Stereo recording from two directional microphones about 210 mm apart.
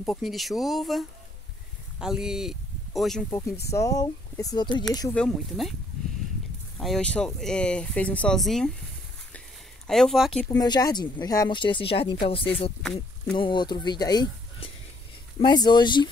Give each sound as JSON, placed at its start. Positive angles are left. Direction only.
{"t": 0.0, "sound": "speech", "side_deg": 0}
{"t": 3.3, "sound": "speech", "side_deg": 15}
{"t": 5.1, "sound": "speech", "side_deg": 0}
{"t": 6.8, "sound": "speech", "side_deg": 5}
{"t": 9.8, "sound": "speech", "side_deg": 0}
{"t": 10.5, "sound": "speech", "side_deg": 20}
{"t": 12.8, "sound": "a sound", "side_deg": 5}
{"t": 13.4, "sound": "speech", "side_deg": 20}